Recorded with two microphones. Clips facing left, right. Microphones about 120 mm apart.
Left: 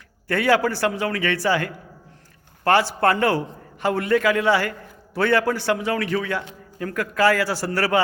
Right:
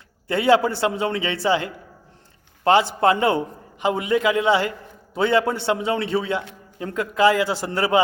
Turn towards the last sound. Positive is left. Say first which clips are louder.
# right 1 dB
turn(degrees=-20)  # may be behind; listen again after turning